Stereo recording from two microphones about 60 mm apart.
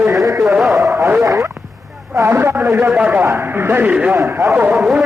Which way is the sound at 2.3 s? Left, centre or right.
Right.